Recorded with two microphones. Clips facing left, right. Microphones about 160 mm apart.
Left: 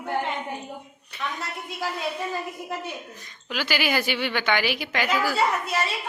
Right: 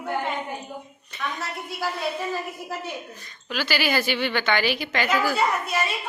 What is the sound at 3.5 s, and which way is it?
Speech, 15° left (ahead or behind).